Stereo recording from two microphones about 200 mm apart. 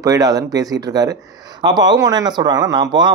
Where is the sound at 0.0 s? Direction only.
20° right (ahead or behind).